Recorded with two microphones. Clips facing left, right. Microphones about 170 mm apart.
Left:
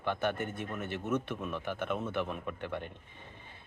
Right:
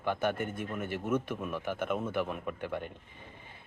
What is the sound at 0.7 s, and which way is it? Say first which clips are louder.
Speech: right 2 dB; 5° right (ahead or behind).